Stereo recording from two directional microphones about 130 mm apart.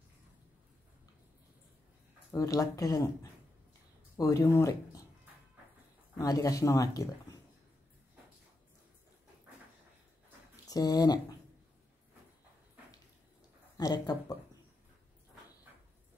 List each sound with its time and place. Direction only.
2.3 s speech: 25° left (ahead or behind)
6.1 s speech: 25° left (ahead or behind)
10.5 s a sound: 30° left (ahead or behind)
13.7 s speech: 30° left (ahead or behind)